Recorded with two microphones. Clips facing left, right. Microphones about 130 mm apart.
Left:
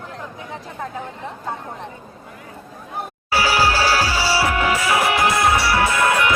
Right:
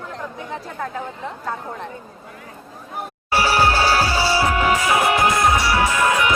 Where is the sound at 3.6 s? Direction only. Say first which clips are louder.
Right 1 dB; 40° right (ahead or behind).